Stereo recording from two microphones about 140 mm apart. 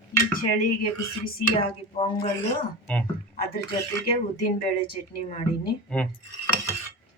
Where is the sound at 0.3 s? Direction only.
90° left.